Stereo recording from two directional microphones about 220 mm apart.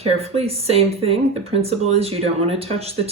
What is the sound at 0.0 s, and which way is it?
Speech, 30° right (ahead or behind).